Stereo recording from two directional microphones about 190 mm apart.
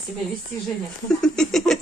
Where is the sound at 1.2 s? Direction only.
5° left (ahead or behind).